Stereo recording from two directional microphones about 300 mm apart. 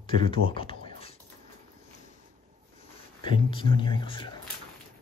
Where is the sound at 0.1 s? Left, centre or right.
Centre.